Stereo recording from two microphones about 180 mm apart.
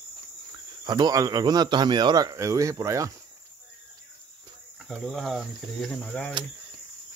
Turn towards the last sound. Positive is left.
turn(degrees=5)  # may be behind; listen again after turning